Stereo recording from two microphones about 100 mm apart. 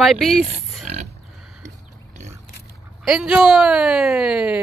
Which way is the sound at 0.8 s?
90° right.